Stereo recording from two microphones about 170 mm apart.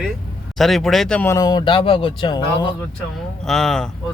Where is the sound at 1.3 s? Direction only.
20° left (ahead or behind).